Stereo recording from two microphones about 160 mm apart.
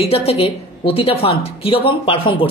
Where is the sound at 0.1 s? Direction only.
40° left (ahead or behind).